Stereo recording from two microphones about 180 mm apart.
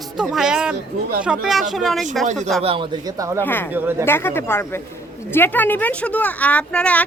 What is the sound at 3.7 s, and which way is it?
Speech, 10° right (ahead or behind).